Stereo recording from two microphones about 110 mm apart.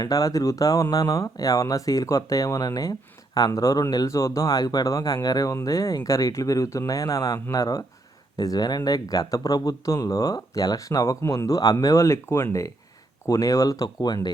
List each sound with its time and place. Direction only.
0.0 s speech: 30° left (ahead or behind)